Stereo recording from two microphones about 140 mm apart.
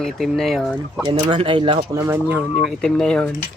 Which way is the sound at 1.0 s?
35° right (ahead or behind).